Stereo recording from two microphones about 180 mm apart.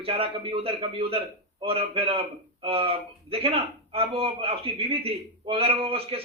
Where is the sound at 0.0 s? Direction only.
30° right (ahead or behind).